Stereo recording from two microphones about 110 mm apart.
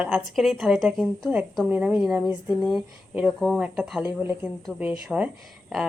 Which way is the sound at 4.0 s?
15° right (ahead or behind).